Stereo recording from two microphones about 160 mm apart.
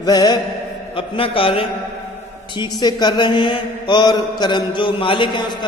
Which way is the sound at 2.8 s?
25° left (ahead or behind).